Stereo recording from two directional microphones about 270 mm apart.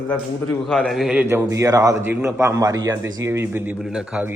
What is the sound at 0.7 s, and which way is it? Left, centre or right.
A man's voice, centre.